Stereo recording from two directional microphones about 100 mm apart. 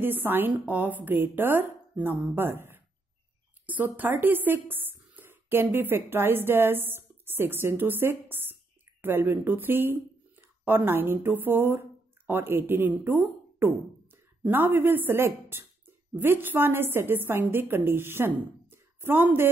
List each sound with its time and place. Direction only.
0.0 s a woman's voice: 20° right (ahead or behind)
14.4 s speech: 20° right (ahead or behind)